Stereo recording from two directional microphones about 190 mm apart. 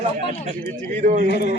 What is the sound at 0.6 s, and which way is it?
Speech, 45° right (ahead or behind).